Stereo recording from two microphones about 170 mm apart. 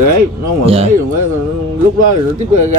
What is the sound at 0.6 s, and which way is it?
Speech, 35° right (ahead or behind).